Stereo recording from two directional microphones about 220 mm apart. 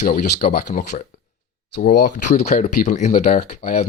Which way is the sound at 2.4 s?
30° left (ahead or behind).